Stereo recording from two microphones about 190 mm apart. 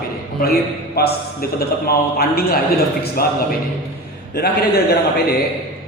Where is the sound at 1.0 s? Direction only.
55° left (ahead or behind).